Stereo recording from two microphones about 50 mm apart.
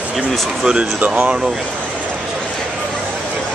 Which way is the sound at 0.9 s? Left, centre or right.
Right.